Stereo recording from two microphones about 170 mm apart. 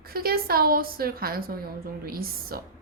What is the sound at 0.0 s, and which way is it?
A woman's voice, 65° right (ahead or behind).